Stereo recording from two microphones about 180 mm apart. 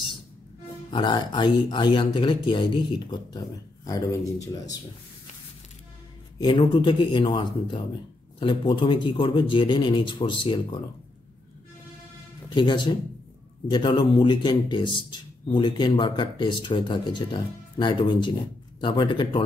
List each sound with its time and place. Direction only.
0.8 s speech: 25° left (ahead or behind)
6.4 s speech: 25° left (ahead or behind)
12.5 s speech: 25° left (ahead or behind)